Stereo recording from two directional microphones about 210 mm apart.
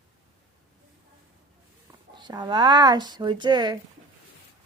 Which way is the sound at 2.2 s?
20° right (ahead or behind).